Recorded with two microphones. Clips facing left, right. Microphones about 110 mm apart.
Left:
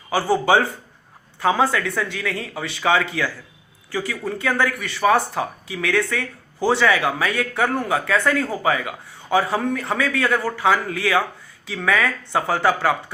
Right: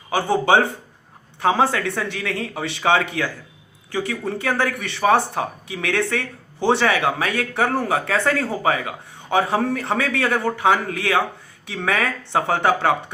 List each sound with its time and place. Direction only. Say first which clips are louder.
0.1 s speech: even; 25° right (ahead or behind)